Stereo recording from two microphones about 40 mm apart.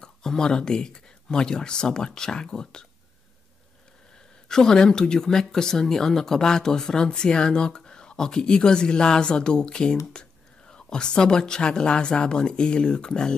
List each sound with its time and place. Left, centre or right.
0.0 s speech: centre
4.5 s speech: centre